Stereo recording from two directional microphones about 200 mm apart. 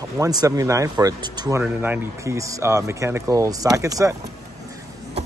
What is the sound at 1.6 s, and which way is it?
Speech, 10° right (ahead or behind).